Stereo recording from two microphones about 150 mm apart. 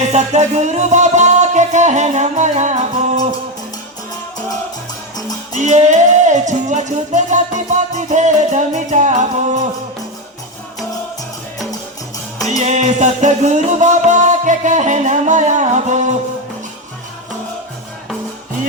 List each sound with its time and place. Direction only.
0.1 s music: 50° right (ahead or behind)
5.5 s music: 50° right (ahead or behind)
12.6 s music: 50° right (ahead or behind)